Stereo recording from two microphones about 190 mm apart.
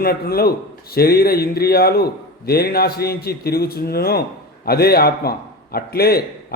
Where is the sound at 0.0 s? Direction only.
55° left (ahead or behind).